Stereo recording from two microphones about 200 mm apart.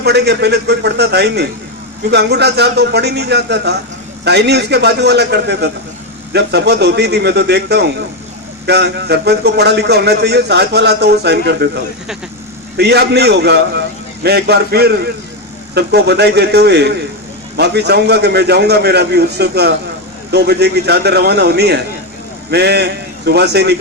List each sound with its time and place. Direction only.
0.0 s a man's voice: 55° right (ahead or behind)